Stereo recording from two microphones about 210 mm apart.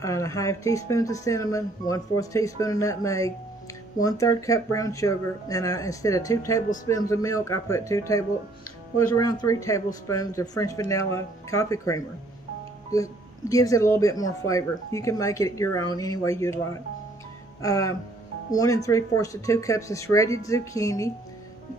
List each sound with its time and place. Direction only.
0.0 s speech: 15° left (ahead or behind)
17.6 s speech: 15° left (ahead or behind)